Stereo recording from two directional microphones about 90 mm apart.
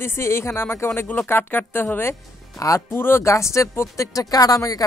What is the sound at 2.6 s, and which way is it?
Speech, 35° left (ahead or behind).